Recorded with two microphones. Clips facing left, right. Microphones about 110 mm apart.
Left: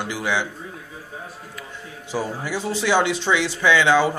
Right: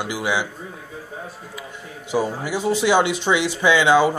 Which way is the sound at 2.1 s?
15° right (ahead or behind).